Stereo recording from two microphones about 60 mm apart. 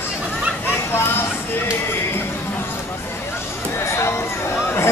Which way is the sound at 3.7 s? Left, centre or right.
Left.